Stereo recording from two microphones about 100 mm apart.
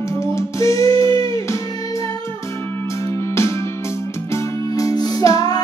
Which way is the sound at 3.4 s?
30° left (ahead or behind).